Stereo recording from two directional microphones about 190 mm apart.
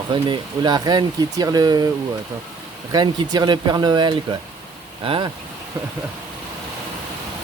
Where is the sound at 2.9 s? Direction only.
20° right (ahead or behind).